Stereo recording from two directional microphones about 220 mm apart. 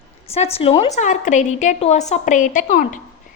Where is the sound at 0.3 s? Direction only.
25° left (ahead or behind).